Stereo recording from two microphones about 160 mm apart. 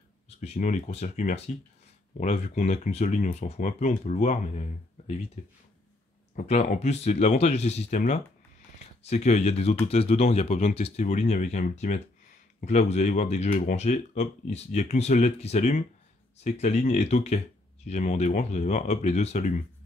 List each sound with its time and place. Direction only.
0.4 s speech: 45° left (ahead or behind)
6.3 s speech: 45° left (ahead or behind)
9.0 s speech: 45° left (ahead or behind)